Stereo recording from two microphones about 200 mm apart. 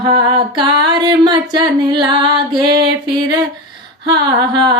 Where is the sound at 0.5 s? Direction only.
20° right (ahead or behind).